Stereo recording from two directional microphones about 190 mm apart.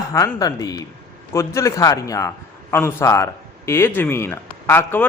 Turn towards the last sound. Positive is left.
turn(degrees=10)  # may be behind; listen again after turning